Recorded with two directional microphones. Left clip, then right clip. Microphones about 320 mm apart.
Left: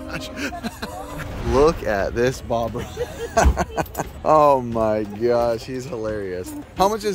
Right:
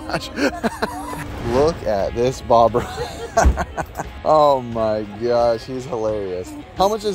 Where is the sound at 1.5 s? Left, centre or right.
Centre.